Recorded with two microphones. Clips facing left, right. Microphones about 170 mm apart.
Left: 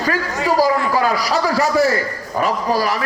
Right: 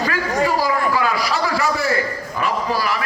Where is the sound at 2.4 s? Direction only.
40° left (ahead or behind).